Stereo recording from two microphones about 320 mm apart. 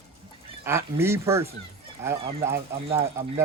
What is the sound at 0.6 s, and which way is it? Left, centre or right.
Speech, centre.